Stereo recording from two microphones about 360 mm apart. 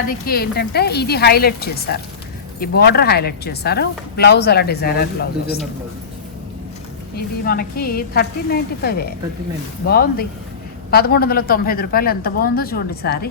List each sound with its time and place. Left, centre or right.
0.3 s speech: left
7.2 s speech: left